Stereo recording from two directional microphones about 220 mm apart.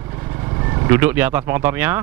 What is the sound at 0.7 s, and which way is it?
Speech, 15° right (ahead or behind).